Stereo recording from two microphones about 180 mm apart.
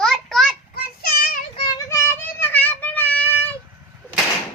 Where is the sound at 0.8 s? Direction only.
55° left (ahead or behind).